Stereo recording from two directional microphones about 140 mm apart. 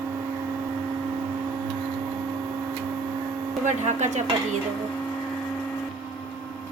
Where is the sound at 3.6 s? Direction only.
55° right (ahead or behind).